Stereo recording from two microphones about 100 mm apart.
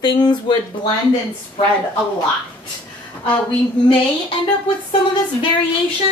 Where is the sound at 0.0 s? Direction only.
50° left (ahead or behind).